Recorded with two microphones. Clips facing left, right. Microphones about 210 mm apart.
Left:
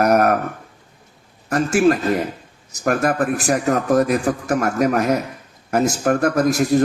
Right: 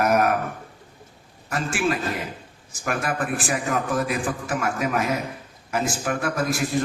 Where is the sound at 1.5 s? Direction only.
40° left (ahead or behind).